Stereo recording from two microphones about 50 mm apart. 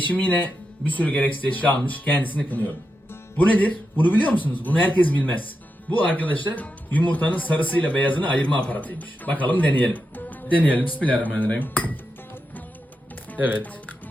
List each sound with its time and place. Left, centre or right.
0.0 s a man's voice: left